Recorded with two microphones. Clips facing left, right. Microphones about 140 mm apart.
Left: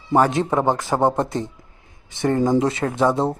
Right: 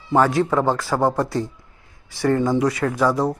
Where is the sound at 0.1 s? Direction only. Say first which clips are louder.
Even; 20° left (ahead or behind).